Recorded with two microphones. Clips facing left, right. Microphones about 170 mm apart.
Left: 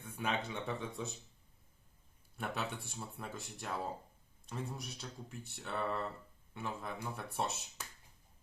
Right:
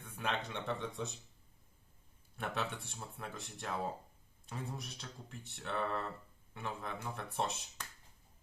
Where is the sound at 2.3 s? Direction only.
Centre (ahead or behind).